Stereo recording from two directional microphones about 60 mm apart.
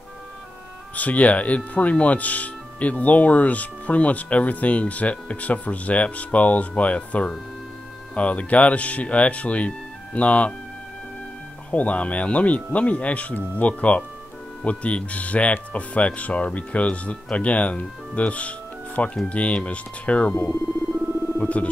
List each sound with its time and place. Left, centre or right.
0.9 s speech: left
11.7 s speech: left
21.0 s music: right
21.4 s a sound: left